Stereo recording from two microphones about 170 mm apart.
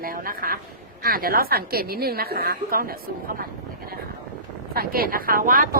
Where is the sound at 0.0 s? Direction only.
60° right (ahead or behind).